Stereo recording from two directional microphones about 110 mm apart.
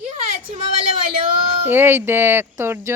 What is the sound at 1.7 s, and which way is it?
Speech, 20° right (ahead or behind).